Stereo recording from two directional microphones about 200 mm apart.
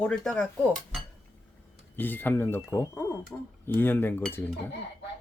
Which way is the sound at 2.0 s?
10° left (ahead or behind).